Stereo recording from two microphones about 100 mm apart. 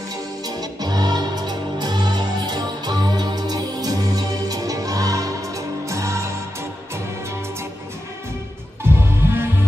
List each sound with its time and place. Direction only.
0.5 s music: 40° right (ahead or behind)
8.8 s music: 25° right (ahead or behind)